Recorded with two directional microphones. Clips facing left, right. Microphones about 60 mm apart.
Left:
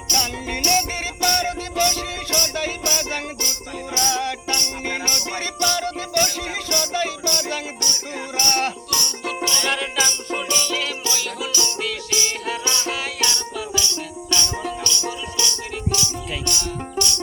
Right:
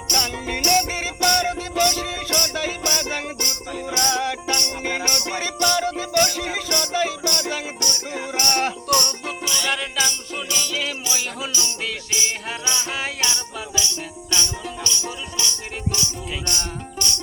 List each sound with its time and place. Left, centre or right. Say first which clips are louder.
0.1 s music: even; centre
8.9 s music: right 6 dB; right
9.2 s music: left 2 dB; centre
11.1 s music: left 1 dB; centre